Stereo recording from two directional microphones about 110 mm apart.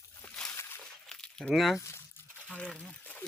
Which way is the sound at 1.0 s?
5° left (ahead or behind).